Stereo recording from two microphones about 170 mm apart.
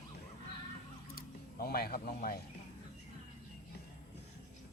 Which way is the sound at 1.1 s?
60° left (ahead or behind).